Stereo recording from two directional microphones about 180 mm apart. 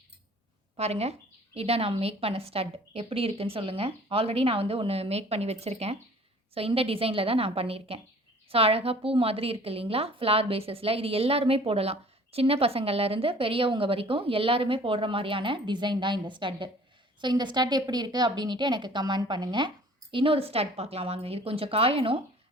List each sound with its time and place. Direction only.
0.8 s a woman's voice: 35° right (ahead or behind)